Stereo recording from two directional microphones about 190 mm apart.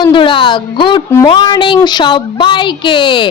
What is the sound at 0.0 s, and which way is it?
A woman's voice, 25° left (ahead or behind).